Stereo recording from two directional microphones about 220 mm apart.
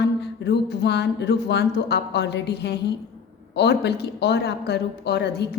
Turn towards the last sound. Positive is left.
turn(degrees=50)  # may be behind; listen again after turning